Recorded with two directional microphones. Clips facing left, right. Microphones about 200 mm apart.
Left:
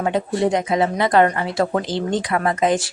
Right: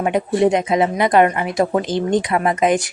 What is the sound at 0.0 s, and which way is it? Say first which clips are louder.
Speech: right 3 dB; 20° right (ahead or behind).